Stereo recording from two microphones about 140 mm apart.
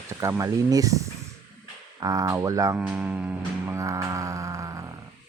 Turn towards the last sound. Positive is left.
turn(degrees=-25)  # may be behind; listen again after turning